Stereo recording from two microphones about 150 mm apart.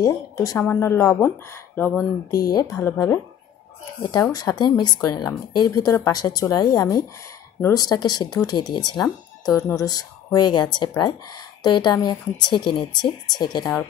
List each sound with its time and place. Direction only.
0.0 s speech: 25° left (ahead or behind)
2.5 s speech: 25° left (ahead or behind)